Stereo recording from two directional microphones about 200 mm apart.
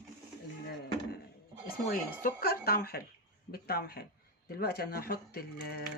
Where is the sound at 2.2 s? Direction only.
50° left (ahead or behind).